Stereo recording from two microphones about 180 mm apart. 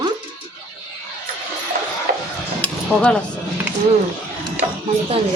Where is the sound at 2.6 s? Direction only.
5° left (ahead or behind).